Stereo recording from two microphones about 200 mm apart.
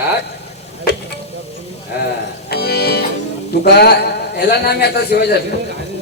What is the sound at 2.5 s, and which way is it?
Music, 55° left (ahead or behind).